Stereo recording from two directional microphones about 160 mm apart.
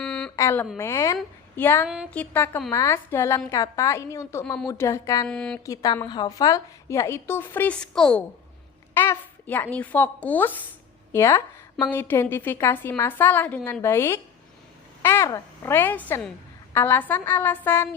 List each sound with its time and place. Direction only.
0.0 s a sound: 5° left (ahead or behind)
0.3 s a woman's voice: 15° left (ahead or behind)
4.4 s a woman's voice: 5° left (ahead or behind)
4.7 s a woman's voice: 20° left (ahead or behind)
5.3 s a woman's voice: 5° left (ahead or behind)
5.6 s a woman's voice: 20° left (ahead or behind)